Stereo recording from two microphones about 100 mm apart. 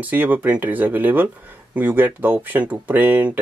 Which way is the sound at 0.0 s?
15° right (ahead or behind).